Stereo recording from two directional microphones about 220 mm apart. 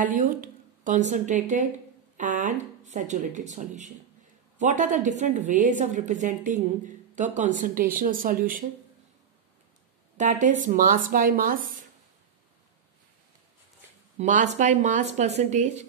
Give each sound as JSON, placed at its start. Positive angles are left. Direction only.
{"t": 0.0, "sound": "speech", "side_deg": -35}
{"t": 10.1, "sound": "a woman's voice", "side_deg": -35}
{"t": 14.1, "sound": "speech", "side_deg": -35}